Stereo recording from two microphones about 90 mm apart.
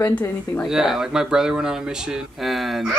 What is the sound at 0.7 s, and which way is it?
Speech, 5° right (ahead or behind).